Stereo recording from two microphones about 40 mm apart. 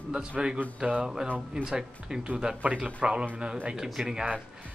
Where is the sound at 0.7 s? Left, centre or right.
Right.